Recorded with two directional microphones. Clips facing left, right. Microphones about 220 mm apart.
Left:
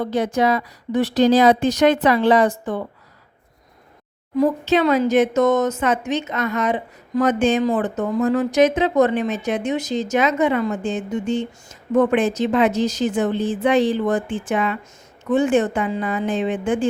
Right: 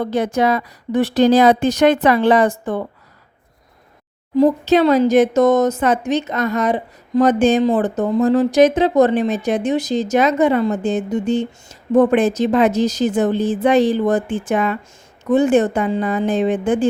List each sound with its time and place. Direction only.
0.0 s speech: 55° right (ahead or behind)
4.4 s speech: 35° right (ahead or behind)